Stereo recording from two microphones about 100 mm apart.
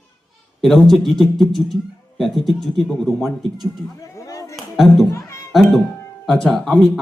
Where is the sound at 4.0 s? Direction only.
35° left (ahead or behind).